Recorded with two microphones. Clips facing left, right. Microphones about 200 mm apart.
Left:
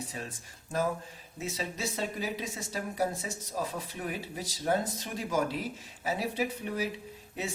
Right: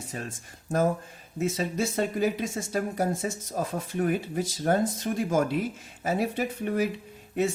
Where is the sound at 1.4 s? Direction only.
50° right (ahead or behind).